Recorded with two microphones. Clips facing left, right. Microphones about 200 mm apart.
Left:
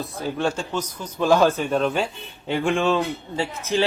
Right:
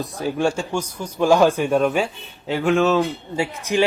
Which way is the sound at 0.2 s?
10° right (ahead or behind).